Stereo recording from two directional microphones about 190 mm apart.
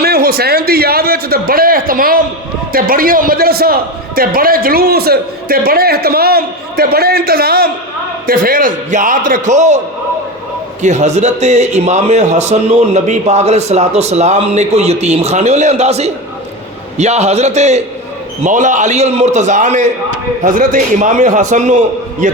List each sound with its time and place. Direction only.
0.0 s a man's voice: 55° right (ahead or behind)
10.8 s a man's voice: 35° right (ahead or behind)